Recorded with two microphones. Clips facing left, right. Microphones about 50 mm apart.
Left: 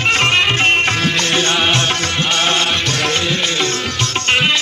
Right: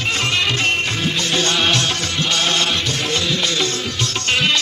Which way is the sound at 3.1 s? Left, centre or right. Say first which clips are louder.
Left 2 dB; left.